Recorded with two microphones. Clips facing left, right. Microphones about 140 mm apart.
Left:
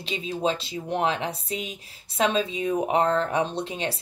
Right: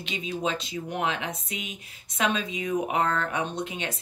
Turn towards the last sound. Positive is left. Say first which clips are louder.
# left 3 dB
turn(degrees=30)  # may be behind; listen again after turning